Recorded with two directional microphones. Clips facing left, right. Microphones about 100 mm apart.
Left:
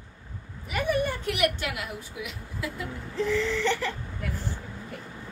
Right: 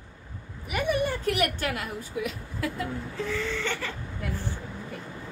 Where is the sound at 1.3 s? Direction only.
40° right (ahead or behind).